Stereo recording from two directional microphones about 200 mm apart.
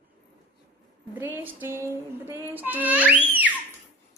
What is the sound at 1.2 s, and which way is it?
Child singing, 10° right (ahead or behind).